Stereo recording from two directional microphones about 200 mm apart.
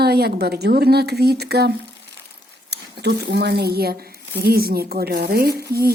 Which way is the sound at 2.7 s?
55° right (ahead or behind).